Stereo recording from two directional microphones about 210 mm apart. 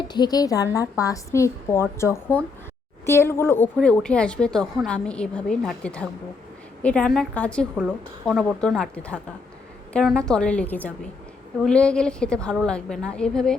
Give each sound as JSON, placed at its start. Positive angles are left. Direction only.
{"t": 0.1, "sound": "a woman's voice", "side_deg": 20}